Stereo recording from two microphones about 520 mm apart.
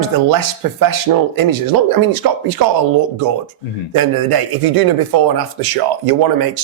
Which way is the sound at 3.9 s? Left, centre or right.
Right.